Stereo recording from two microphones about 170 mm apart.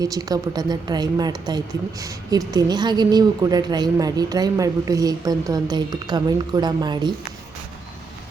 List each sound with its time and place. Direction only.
0.0 s a woman's voice: 20° right (ahead or behind)